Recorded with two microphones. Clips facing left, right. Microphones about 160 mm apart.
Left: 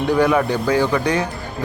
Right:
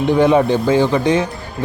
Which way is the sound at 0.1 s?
25° right (ahead or behind).